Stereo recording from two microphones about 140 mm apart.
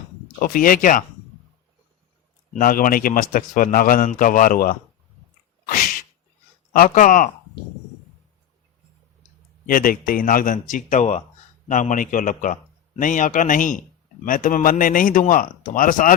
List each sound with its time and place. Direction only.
0.3 s a man's voice: 80° left
2.6 s a man's voice: 85° left
6.7 s a man's voice: 75° left (ahead or behind)
9.6 s a man's voice: 85° left